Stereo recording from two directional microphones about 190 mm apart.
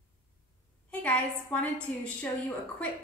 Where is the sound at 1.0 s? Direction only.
5° left (ahead or behind).